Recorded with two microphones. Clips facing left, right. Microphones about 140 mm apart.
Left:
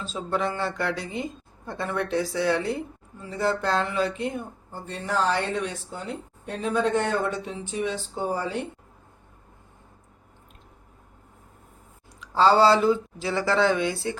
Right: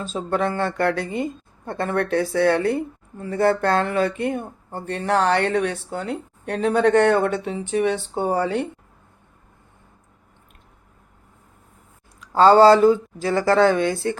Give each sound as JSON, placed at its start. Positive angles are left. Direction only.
{"t": 0.0, "sound": "speech", "side_deg": -50}
{"t": 12.2, "sound": "speech", "side_deg": -50}